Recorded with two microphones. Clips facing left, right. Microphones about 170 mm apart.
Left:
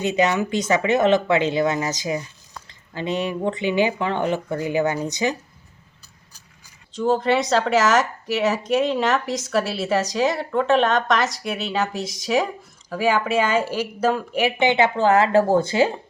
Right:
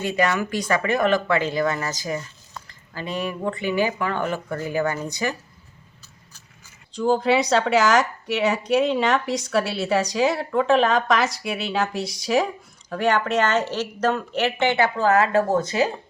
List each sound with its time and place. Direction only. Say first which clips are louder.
0.0 s speech: left 2 dB; 20° left (ahead or behind)
6.9 s a woman's voice: even; centre (ahead or behind); by 15.9 s 30° left (ahead or behind)